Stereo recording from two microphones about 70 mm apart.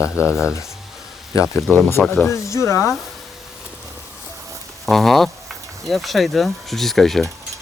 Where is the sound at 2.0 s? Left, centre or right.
Centre.